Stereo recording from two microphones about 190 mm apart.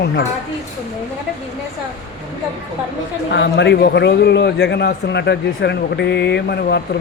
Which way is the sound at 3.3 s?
65° left (ahead or behind).